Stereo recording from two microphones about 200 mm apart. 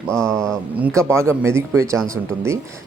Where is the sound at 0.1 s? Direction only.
5° left (ahead or behind).